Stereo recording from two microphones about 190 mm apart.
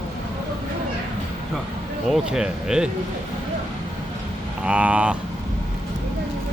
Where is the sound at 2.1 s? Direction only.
5° right (ahead or behind).